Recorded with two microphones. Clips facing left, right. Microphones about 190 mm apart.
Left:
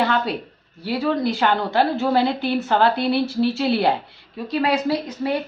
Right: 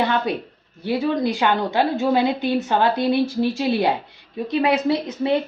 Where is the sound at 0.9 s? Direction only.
15° right (ahead or behind).